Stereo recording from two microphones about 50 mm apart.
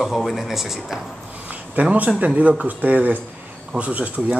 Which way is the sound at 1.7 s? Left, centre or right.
Right.